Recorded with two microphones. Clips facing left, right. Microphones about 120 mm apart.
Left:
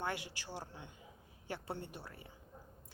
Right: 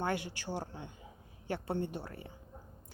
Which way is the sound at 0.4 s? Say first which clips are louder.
Right 7 dB; 25° right (ahead or behind).